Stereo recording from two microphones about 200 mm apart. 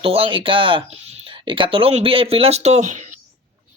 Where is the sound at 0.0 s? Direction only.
25° right (ahead or behind).